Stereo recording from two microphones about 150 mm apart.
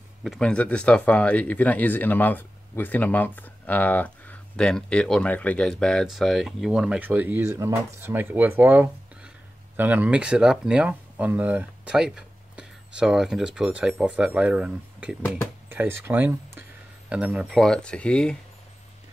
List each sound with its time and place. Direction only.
0.2 s speech: 5° left (ahead or behind)